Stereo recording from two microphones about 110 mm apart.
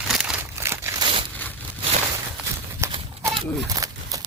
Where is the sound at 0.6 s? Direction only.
25° right (ahead or behind).